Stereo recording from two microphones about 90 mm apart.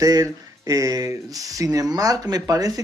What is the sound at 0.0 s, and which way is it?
Speech, 40° right (ahead or behind).